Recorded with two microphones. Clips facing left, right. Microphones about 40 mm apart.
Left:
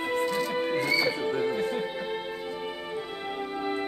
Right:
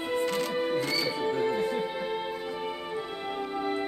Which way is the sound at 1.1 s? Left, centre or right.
Centre.